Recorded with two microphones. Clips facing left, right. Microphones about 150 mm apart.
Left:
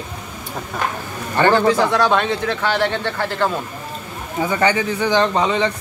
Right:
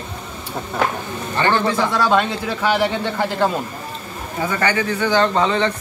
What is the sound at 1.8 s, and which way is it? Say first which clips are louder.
Speech: left 1 dB; 5° right (ahead or behind).